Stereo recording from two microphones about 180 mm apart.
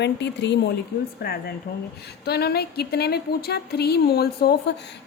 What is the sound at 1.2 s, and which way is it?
A woman's voice, 60° left (ahead or behind).